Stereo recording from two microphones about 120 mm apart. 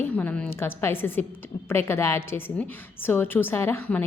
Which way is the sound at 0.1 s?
15° left (ahead or behind).